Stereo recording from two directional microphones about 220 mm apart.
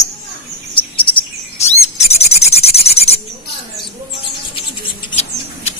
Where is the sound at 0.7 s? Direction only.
25° left (ahead or behind).